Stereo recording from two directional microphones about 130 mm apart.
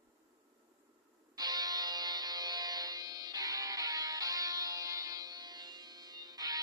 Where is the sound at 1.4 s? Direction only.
30° right (ahead or behind).